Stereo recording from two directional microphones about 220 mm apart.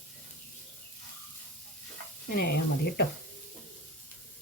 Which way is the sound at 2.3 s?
45° left (ahead or behind).